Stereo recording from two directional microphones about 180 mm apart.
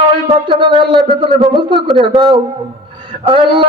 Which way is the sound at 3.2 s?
25° right (ahead or behind).